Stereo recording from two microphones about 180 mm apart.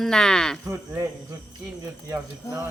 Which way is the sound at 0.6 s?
15° right (ahead or behind).